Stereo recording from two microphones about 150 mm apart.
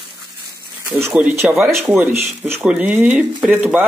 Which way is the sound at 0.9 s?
10° right (ahead or behind).